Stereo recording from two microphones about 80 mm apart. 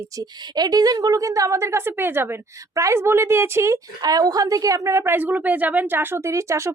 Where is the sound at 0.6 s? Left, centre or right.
Right.